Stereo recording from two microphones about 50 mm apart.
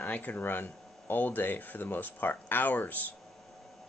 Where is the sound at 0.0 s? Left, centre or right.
Left.